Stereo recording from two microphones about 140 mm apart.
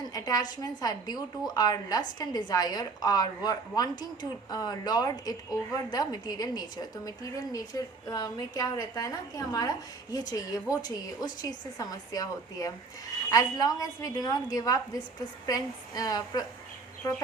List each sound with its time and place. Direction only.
0.1 s a woman's voice: 25° left (ahead or behind)